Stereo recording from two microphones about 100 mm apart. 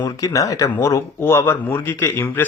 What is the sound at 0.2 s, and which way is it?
Speech, 35° left (ahead or behind).